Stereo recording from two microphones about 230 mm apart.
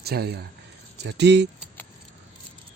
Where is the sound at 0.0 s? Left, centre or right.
Right.